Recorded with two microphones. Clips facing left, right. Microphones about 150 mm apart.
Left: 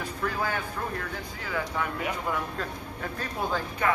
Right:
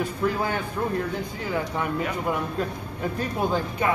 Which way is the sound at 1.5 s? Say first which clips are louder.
Right 3 dB; 20° right (ahead or behind).